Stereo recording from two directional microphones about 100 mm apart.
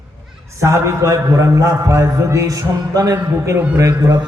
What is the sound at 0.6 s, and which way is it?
A man's voice, 30° right (ahead or behind).